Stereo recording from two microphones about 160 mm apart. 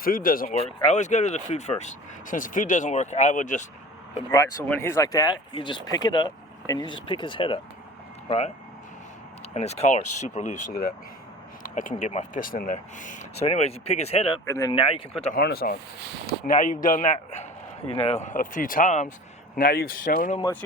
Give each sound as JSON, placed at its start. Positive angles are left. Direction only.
{"t": 0.0, "sound": "speech", "side_deg": 60}
{"t": 0.8, "sound": "speech", "side_deg": 45}
{"t": 4.3, "sound": "speech", "side_deg": 20}
{"t": 9.6, "sound": "speech", "side_deg": 40}
{"t": 11.6, "sound": "speech", "side_deg": 55}
{"t": 14.4, "sound": "speech", "side_deg": 20}
{"t": 14.7, "sound": "speech", "side_deg": 35}
{"t": 15.3, "sound": "speech", "side_deg": 70}
{"t": 16.2, "sound": "speech", "side_deg": 60}
{"t": 19.5, "sound": "speech", "side_deg": 70}